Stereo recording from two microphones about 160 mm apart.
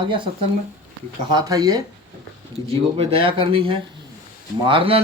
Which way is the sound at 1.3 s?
25° right (ahead or behind).